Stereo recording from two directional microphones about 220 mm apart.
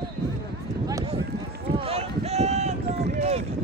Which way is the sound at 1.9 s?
30° right (ahead or behind).